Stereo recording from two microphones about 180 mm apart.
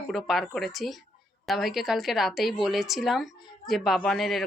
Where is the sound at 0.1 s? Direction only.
Centre (ahead or behind).